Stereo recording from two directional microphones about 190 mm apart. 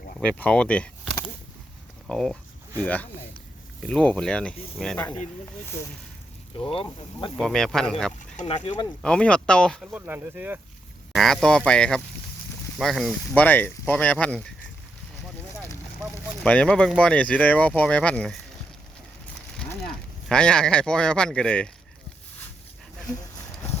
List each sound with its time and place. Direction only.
0.2 s speech: 5° left (ahead or behind)
2.0 s speech: 5° left (ahead or behind)
6.8 s speech: 25° left (ahead or behind)
7.3 s speech: 5° left (ahead or behind)
8.5 s speech: 25° left (ahead or behind)
9.0 s speech: 5° left (ahead or behind)
9.9 s speech: 10° right (ahead or behind)
16.4 s speech: 5° left (ahead or behind)
20.2 s speech: 5° left (ahead or behind)